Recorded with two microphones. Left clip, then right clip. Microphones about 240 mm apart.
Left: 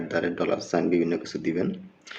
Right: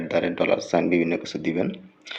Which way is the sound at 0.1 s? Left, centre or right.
Centre.